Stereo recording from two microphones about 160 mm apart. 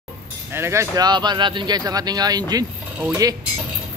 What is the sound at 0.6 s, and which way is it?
Speech, 15° right (ahead or behind).